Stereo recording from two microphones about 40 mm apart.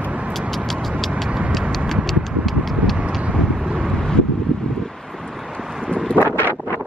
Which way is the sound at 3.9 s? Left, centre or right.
Centre.